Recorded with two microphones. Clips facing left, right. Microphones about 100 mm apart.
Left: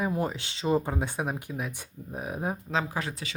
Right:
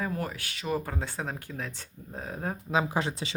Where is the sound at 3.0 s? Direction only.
25° right (ahead or behind).